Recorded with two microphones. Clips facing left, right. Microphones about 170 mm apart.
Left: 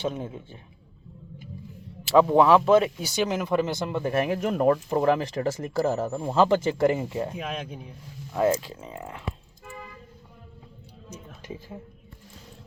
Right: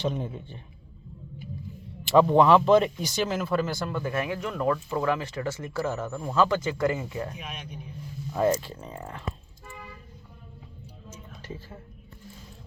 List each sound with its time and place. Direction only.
0.0 s a man's voice: 5° left (ahead or behind)
2.0 s speech: centre (ahead or behind); by 7.3 s 25° left (ahead or behind)
7.3 s speech: 90° left
8.3 s speech: 5° left (ahead or behind)
11.1 s music: 10° left (ahead or behind)